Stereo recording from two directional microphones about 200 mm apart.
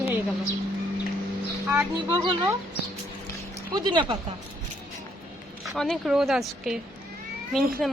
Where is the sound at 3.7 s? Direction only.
20° right (ahead or behind).